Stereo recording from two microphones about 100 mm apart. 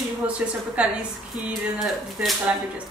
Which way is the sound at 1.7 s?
Centre (ahead or behind).